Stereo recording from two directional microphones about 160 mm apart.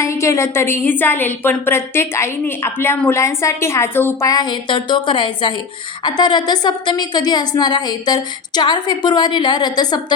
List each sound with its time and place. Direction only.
0.0 s a woman's voice: 20° left (ahead or behind)